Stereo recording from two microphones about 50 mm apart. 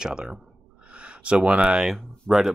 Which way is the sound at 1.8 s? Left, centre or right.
Centre.